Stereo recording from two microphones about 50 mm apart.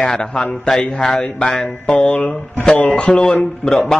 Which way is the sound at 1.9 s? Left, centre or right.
Left.